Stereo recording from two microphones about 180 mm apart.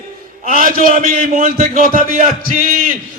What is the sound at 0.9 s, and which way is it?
A man's voice, 50° right (ahead or behind).